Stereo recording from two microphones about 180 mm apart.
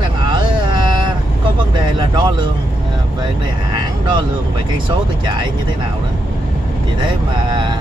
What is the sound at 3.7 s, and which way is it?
Speech, 25° right (ahead or behind).